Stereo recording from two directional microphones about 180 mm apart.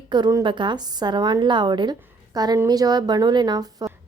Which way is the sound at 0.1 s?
20° right (ahead or behind).